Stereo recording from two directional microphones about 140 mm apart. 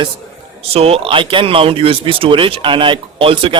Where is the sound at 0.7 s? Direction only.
45° right (ahead or behind).